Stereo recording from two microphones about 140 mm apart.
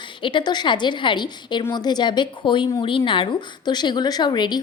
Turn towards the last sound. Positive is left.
turn(degrees=30)  # may be behind; listen again after turning